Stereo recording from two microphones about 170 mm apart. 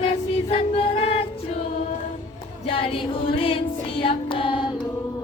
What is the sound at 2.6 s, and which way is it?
Female singing, 35° left (ahead or behind).